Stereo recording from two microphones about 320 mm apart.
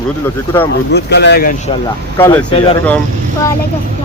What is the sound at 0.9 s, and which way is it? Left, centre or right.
Speech, left.